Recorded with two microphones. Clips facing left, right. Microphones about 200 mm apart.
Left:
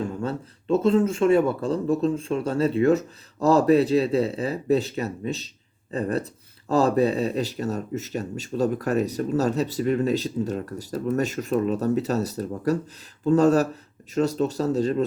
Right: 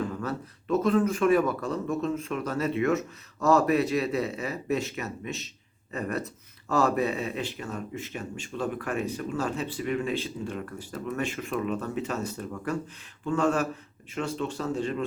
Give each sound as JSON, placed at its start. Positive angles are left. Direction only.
{"t": 0.0, "sound": "speech", "side_deg": 25}